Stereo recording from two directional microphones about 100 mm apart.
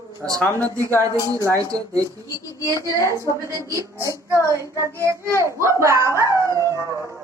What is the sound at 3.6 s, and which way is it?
Speech, 30° right (ahead or behind).